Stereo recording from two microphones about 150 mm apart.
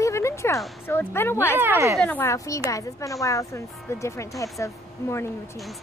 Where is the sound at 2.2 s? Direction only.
20° left (ahead or behind).